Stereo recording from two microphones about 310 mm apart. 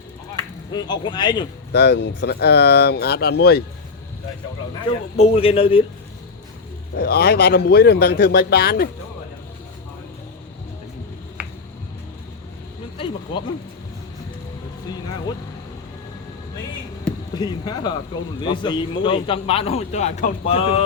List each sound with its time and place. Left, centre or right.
0.7 s a man's voice: centre
1.7 s speech: left
4.9 s a man's voice: centre
6.9 s speech: left
11.4 s finger snapping: centre
13.3 s a man's voice: centre
17.3 s a man's voice: centre